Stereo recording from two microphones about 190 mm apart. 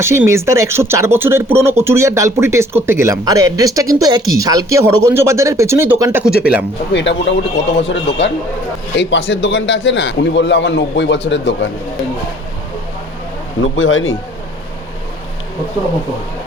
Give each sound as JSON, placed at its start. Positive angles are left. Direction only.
{"t": 0.0, "sound": "speech", "side_deg": -15}
{"t": 6.9, "sound": "a man's voice", "side_deg": 70}
{"t": 13.6, "sound": "a man's voice", "side_deg": 90}